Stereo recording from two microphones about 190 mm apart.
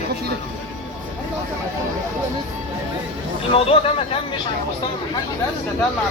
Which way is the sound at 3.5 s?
30° left (ahead or behind).